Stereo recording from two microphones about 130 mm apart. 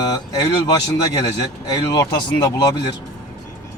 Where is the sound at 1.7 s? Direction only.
30° left (ahead or behind).